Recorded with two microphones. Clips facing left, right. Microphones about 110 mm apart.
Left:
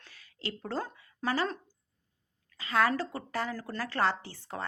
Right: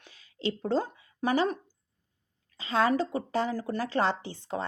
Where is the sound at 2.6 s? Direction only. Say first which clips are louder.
Right 2 dB; 25° right (ahead or behind).